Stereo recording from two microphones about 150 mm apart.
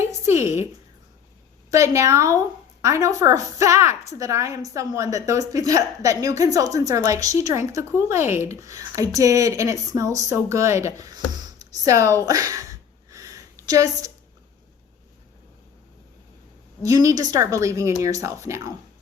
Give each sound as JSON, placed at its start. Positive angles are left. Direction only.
{"t": 0.0, "sound": "a sound", "side_deg": -20}
{"t": 1.7, "sound": "a woman's voice", "side_deg": -20}
{"t": 16.8, "sound": "a woman's voice", "side_deg": -20}